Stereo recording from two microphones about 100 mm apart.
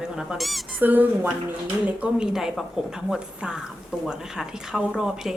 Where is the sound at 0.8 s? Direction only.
20° right (ahead or behind).